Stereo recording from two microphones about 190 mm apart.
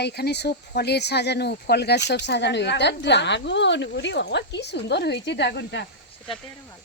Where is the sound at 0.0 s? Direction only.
60° left (ahead or behind).